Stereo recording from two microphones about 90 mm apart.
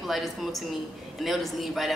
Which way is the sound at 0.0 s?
Centre (ahead or behind).